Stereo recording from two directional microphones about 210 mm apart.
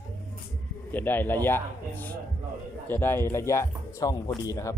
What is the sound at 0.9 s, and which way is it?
Speech, 10° left (ahead or behind).